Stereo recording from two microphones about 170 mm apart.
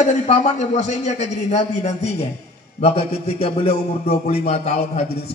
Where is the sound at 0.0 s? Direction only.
45° left (ahead or behind).